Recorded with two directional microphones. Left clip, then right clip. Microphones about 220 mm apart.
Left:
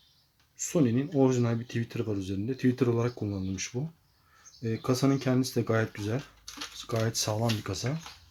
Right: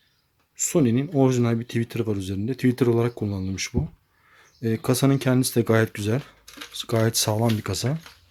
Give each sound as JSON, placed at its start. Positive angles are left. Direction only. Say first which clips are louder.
{"t": 0.5, "sound": "speech", "louder": "right 6 dB", "side_deg": -40}